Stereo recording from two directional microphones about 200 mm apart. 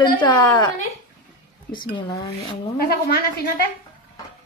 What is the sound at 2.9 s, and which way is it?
Speech, 50° left (ahead or behind).